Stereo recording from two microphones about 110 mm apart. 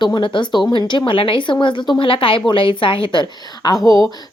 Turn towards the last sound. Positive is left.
turn(degrees=35)  # may be behind; listen again after turning